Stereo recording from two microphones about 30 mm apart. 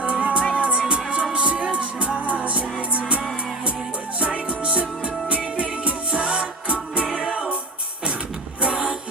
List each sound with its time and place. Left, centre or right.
0.0 s music: right
4.2 s music: right
8.6 s music: right